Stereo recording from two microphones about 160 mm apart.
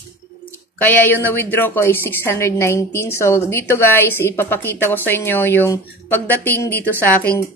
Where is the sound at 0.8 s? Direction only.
10° left (ahead or behind).